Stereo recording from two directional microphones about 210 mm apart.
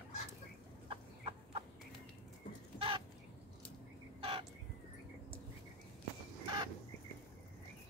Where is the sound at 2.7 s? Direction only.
25° right (ahead or behind).